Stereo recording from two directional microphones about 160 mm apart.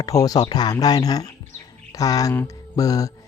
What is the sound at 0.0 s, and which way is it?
Speech, 20° left (ahead or behind).